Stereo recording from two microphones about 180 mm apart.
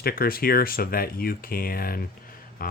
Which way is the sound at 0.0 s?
55° left (ahead or behind).